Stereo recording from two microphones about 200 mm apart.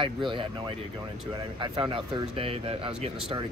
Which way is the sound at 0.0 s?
25° right (ahead or behind).